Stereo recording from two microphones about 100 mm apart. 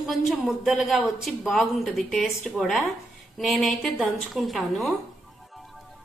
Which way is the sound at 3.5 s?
Centre (ahead or behind).